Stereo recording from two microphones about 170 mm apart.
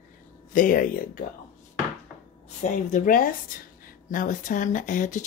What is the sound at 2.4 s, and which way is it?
Speech, 50° left (ahead or behind).